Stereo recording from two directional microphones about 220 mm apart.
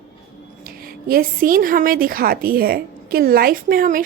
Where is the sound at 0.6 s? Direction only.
40° right (ahead or behind).